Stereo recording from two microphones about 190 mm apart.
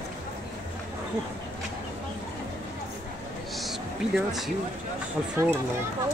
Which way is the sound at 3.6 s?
Centre (ahead or behind).